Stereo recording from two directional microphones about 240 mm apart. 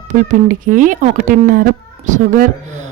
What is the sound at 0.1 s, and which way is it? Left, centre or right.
A woman's voice, right.